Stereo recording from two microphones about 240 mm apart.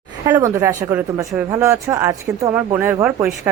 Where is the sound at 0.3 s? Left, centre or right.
Centre.